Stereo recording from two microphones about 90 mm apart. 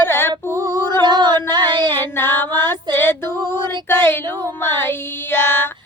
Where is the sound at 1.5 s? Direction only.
55° right (ahead or behind).